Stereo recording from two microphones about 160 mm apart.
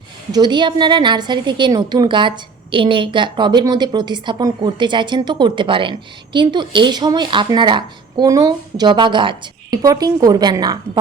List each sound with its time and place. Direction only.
0.3 s a woman's voice: 25° right (ahead or behind)